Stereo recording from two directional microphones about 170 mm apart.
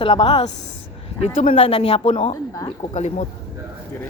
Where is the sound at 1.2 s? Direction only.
40° left (ahead or behind).